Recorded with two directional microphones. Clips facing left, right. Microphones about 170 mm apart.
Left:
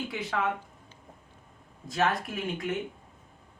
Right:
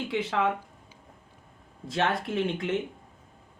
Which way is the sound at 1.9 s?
30° right (ahead or behind).